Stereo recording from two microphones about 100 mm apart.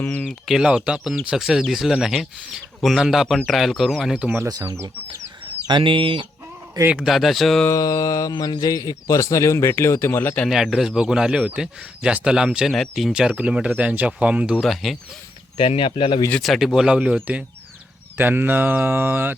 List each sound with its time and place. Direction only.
0.0 s a sound: 20° left (ahead or behind)
0.3 s speech: 5° right (ahead or behind)
4.4 s speech: 35° right (ahead or behind)
5.6 s speech: 55° right (ahead or behind)
7.0 s speech: centre (ahead or behind)
7.7 s a sound: 35° left (ahead or behind)
8.6 s a man's voice: 40° left (ahead or behind); by 10.4 s 20° left (ahead or behind)
10.4 s speech: 5° right (ahead or behind)
14.6 s speech: centre (ahead or behind)
15.5 s speech: 65° left (ahead or behind)
16.4 s speech: centre (ahead or behind)
18.2 s mantra: 20° right (ahead or behind)